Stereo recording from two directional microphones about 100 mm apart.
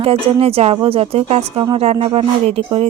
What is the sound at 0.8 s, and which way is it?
Speech, 75° right (ahead or behind).